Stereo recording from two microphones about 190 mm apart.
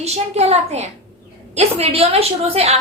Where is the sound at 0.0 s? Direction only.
35° right (ahead or behind).